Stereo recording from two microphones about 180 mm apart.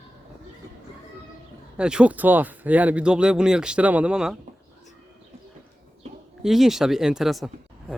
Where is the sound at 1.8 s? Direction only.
5° right (ahead or behind).